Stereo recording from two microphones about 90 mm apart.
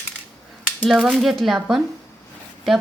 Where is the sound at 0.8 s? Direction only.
Centre (ahead or behind).